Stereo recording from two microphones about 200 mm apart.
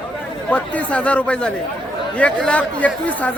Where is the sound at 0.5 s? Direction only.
5° left (ahead or behind).